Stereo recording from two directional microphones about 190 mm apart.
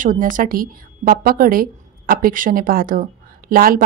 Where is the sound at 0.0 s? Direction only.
45° right (ahead or behind).